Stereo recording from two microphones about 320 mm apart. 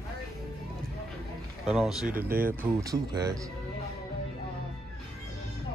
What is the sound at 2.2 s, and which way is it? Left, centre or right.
Speech, right.